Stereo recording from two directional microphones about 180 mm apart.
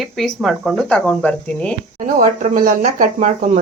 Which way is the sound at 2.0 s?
45° right (ahead or behind).